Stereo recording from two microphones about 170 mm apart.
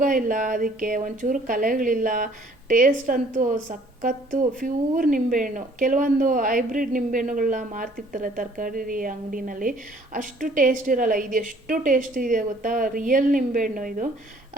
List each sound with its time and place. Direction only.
0.0 s speech: 50° right (ahead or behind)